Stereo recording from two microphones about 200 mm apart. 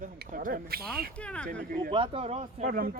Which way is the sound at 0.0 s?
45° right (ahead or behind).